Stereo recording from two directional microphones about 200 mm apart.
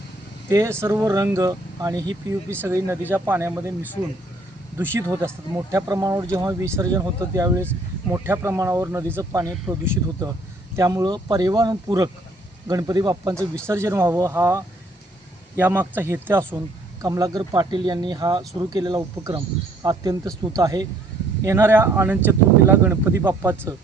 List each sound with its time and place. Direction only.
0.5 s speech: 15° right (ahead or behind)
4.8 s speech: 10° right (ahead or behind)